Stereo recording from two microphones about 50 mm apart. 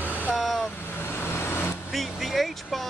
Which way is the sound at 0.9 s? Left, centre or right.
Left.